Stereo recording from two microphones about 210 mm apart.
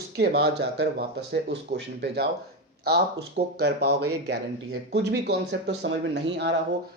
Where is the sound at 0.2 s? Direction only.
50° right (ahead or behind).